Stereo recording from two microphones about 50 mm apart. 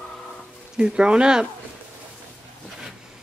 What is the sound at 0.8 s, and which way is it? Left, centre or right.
Speech, centre.